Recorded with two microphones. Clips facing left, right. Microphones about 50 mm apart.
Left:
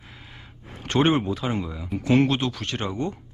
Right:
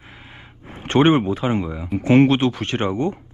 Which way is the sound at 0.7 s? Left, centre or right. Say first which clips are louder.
Right 5 dB; right.